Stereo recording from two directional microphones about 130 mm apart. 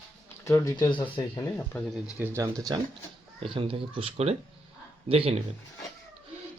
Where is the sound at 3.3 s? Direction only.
45° right (ahead or behind).